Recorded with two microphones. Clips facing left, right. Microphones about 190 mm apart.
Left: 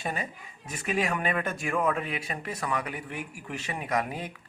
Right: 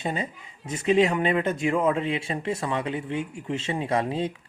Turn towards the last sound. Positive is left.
turn(degrees=-25)  # may be behind; listen again after turning